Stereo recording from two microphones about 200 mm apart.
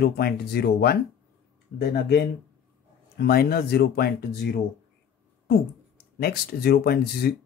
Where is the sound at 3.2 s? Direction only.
50° left (ahead or behind).